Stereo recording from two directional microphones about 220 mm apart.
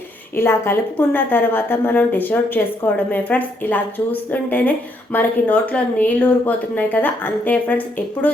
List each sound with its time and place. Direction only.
0.3 s a woman's voice: 10° left (ahead or behind)